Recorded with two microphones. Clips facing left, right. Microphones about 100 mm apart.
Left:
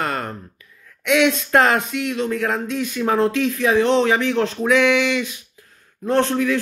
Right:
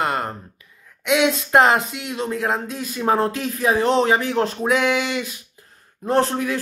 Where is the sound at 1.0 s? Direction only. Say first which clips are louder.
Left 1 dB; 30° right (ahead or behind).